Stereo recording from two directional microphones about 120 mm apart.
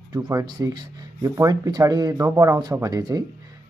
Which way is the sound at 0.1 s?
30° right (ahead or behind).